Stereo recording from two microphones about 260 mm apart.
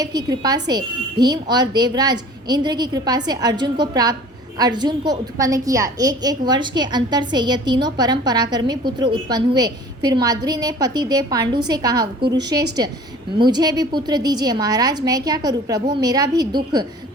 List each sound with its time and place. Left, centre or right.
0.0 s a woman's voice: centre